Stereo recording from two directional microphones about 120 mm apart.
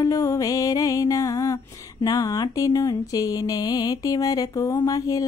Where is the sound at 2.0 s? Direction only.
30° left (ahead or behind).